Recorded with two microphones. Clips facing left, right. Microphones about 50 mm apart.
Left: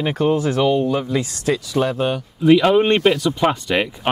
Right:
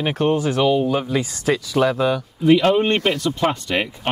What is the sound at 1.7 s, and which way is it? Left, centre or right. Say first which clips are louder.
Speech: right 3 dB; right.